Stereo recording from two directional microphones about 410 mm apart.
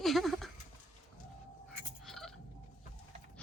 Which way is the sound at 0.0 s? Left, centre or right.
Centre.